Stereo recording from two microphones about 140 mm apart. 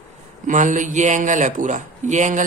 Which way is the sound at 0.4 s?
65° right (ahead or behind).